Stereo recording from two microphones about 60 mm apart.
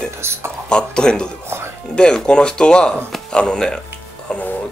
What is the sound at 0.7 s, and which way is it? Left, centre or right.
Speech, centre.